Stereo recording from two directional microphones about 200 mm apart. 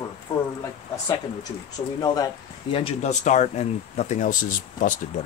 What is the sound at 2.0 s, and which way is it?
Speech, 20° left (ahead or behind).